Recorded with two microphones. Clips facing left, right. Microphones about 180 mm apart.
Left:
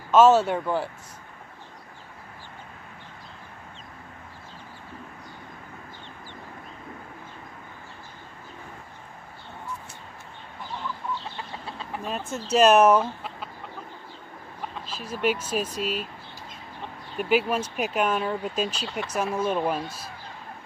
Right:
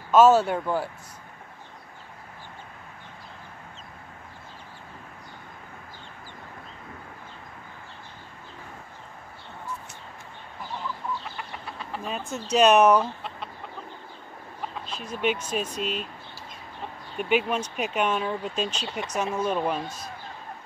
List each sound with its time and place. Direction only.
0.1 s speech: 10° right (ahead or behind)
11.3 s chicken: 25° left (ahead or behind)
12.1 s speech: centre (ahead or behind)
14.9 s speech: 5° left (ahead or behind)
17.2 s speech: 5° left (ahead or behind)